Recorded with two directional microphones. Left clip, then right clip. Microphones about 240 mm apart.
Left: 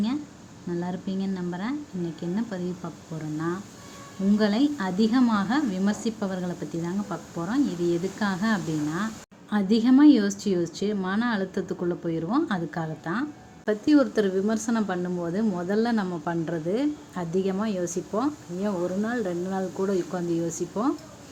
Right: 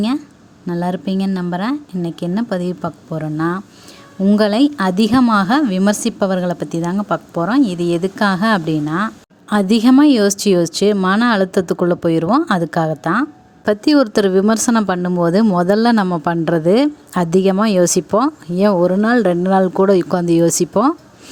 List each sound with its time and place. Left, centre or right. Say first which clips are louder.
0.7 s a woman's voice: right 11 dB; right